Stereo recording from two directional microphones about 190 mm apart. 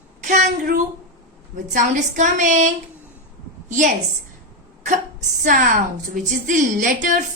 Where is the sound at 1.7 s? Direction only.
40° right (ahead or behind).